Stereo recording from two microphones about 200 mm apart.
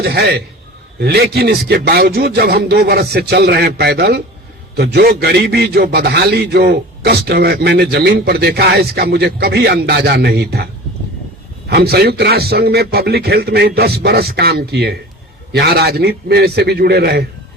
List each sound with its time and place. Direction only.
0.0 s a man's voice: 55° right (ahead or behind)
11.7 s a man's voice: 55° right (ahead or behind)